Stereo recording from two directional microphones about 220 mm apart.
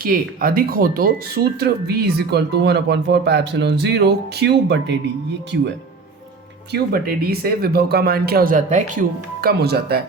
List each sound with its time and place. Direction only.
0.0 s speech: 40° right (ahead or behind)